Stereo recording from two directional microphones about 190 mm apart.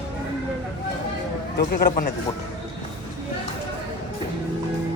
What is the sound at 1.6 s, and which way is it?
Speech, 50° left (ahead or behind).